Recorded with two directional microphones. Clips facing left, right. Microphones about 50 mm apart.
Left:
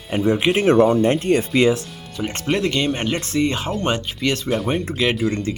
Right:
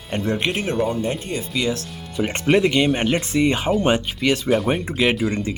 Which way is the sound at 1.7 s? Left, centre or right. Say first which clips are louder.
Left 1 dB; centre.